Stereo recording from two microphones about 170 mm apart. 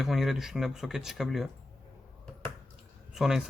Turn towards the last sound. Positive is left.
turn(degrees=0)  # may be behind; listen again after turning